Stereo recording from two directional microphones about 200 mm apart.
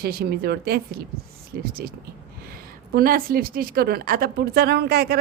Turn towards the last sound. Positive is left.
turn(degrees=-50)  # may be behind; listen again after turning